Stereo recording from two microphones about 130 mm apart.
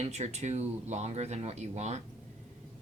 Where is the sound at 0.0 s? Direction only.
60° right (ahead or behind).